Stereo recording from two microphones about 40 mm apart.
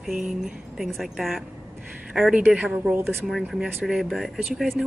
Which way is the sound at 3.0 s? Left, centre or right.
Right.